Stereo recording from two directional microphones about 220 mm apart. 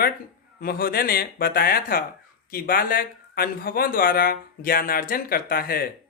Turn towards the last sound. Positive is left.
turn(degrees=45)  # may be behind; listen again after turning